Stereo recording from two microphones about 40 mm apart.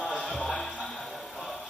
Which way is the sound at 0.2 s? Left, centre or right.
Centre.